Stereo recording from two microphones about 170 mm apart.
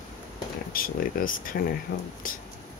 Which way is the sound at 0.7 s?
55° left (ahead or behind).